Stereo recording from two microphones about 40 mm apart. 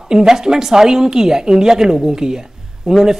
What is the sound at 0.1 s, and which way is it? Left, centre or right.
A woman's voice, centre.